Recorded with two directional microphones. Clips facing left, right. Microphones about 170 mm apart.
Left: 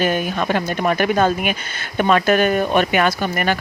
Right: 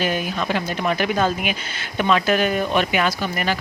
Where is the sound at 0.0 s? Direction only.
50° left (ahead or behind).